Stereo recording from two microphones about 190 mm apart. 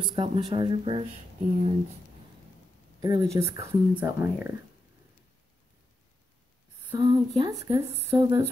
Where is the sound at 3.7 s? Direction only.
15° right (ahead or behind).